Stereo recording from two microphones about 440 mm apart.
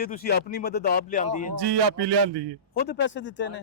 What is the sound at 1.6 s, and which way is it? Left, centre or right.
A man's voice, right.